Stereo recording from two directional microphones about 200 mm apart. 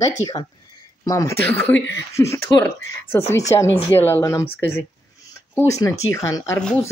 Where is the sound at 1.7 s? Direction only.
65° left (ahead or behind).